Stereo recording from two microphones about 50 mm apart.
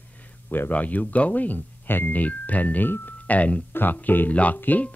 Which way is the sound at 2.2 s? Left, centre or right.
Left.